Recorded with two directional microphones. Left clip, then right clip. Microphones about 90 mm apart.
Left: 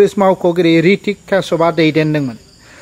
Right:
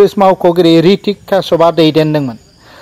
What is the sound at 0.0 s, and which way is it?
Speech, 25° right (ahead or behind).